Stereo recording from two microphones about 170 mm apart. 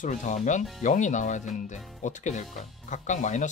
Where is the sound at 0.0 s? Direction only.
45° left (ahead or behind).